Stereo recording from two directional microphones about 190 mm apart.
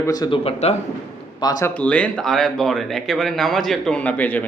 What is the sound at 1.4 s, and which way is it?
Speech, 20° left (ahead or behind).